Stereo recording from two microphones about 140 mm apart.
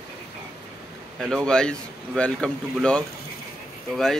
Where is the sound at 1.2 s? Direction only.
5° left (ahead or behind).